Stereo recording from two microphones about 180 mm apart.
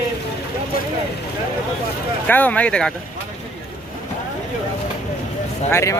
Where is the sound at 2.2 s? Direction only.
10° left (ahead or behind).